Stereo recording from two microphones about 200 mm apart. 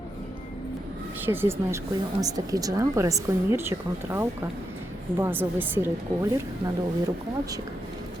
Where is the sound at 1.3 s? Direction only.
10° right (ahead or behind).